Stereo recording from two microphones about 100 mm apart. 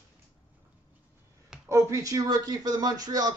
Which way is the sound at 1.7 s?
30° right (ahead or behind).